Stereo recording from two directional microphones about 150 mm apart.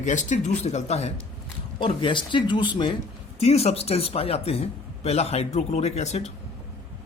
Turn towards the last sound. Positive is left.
turn(degrees=45)  # may be behind; listen again after turning